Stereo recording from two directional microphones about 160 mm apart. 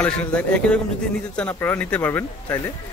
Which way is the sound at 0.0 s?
5° left (ahead or behind).